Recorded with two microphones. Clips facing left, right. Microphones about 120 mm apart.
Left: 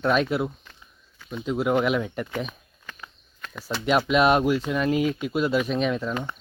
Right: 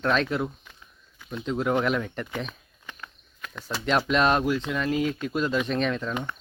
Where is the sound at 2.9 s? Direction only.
20° right (ahead or behind).